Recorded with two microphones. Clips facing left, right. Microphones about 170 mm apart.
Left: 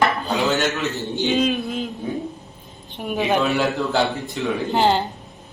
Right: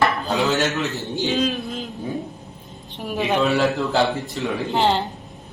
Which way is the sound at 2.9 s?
Centre (ahead or behind).